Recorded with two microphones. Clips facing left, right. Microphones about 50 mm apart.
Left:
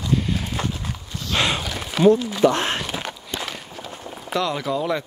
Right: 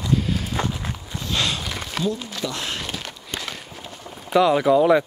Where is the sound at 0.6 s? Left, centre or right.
Centre.